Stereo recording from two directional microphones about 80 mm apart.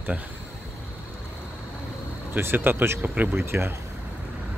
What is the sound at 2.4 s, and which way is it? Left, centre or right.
Speech, right.